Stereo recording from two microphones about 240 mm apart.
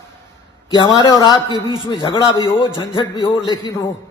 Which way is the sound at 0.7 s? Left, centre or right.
Centre.